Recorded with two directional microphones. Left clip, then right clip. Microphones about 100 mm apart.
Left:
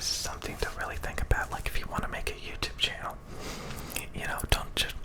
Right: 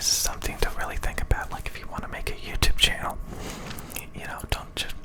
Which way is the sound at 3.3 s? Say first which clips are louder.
Right 3 dB; 25° right (ahead or behind).